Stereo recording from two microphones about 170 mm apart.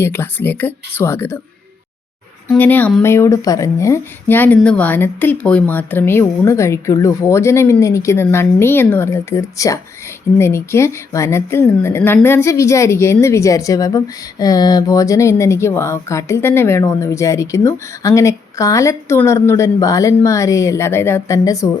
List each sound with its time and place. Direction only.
0.0 s a woman's voice: 15° left (ahead or behind)
2.5 s a woman's voice: 10° left (ahead or behind)